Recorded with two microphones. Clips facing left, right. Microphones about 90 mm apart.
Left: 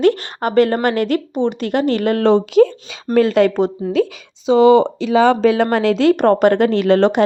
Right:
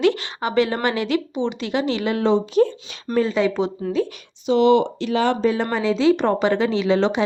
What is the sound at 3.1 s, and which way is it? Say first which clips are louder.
Speech: left 6 dB; 70° left (ahead or behind).